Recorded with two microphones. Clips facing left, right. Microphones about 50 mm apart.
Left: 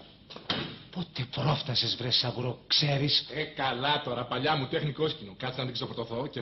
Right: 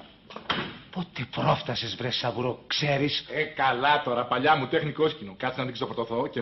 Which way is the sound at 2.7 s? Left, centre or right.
Right.